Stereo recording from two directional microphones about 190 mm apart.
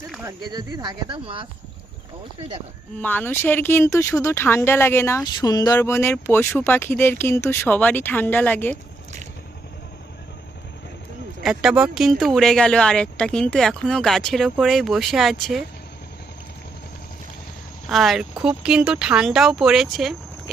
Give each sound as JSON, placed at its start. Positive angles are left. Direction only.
{"t": 0.2, "sound": "speech", "side_deg": -15}
{"t": 3.0, "sound": "speech", "side_deg": 10}
{"t": 11.4, "sound": "speech", "side_deg": -5}
{"t": 17.8, "sound": "speech", "side_deg": 0}